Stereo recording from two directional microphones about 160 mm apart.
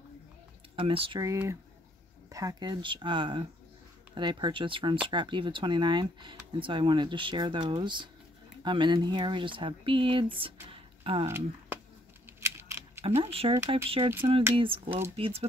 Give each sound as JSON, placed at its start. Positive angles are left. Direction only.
{"t": 0.7, "sound": "speech", "side_deg": -35}
{"t": 1.2, "sound": "speech", "side_deg": -20}
{"t": 11.2, "sound": "speech", "side_deg": -15}
{"t": 12.4, "sound": "camera", "side_deg": -15}
{"t": 13.0, "sound": "speech", "side_deg": -35}